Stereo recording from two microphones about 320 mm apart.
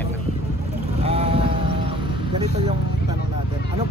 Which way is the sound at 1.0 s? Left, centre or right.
Centre.